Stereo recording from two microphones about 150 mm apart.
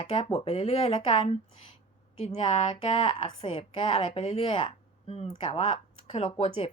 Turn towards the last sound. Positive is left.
turn(degrees=35)  # may be behind; listen again after turning